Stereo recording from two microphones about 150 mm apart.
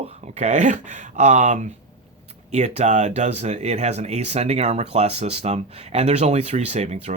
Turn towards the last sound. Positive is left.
turn(degrees=-50)  # may be behind; listen again after turning